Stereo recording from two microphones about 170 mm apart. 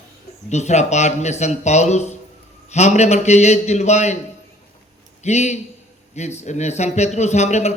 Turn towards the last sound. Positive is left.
turn(degrees=40)  # may be behind; listen again after turning